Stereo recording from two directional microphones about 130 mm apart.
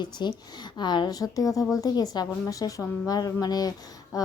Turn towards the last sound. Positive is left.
turn(degrees=25)  # may be behind; listen again after turning